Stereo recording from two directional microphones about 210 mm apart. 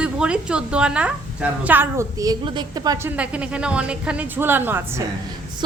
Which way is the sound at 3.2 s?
5° right (ahead or behind).